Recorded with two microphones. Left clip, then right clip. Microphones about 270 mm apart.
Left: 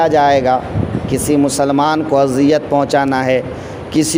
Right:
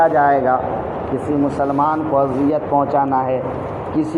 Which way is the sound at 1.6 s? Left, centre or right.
Left.